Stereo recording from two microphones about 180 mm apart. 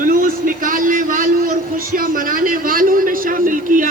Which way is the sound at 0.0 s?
50° right (ahead or behind).